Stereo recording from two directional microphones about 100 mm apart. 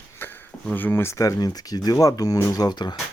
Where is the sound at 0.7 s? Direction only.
20° left (ahead or behind); by 2.9 s 45° left (ahead or behind).